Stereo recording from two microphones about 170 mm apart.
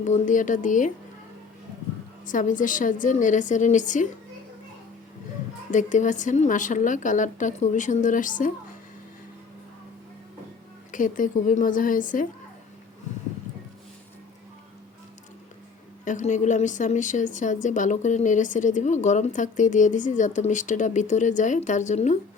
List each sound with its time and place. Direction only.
0.0 s a woman's voice: 45° left (ahead or behind)
2.2 s a woman's voice: 50° left (ahead or behind)
5.7 s a woman's voice: 45° left (ahead or behind)
10.9 s a woman's voice: 50° left (ahead or behind)
16.0 s a woman's voice: 45° left (ahead or behind)